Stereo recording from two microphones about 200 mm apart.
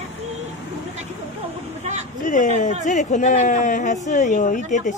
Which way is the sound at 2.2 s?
40° left (ahead or behind).